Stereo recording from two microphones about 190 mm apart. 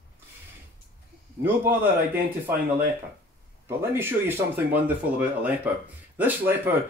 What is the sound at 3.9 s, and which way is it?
Speech, 10° right (ahead or behind).